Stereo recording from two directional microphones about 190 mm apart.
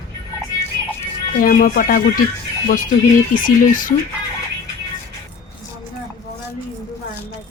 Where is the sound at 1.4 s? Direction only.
45° left (ahead or behind).